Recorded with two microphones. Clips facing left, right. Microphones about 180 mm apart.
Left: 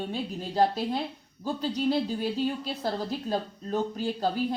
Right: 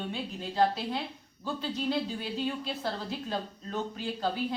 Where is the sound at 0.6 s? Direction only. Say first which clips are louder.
Left 3 dB; 40° left (ahead or behind).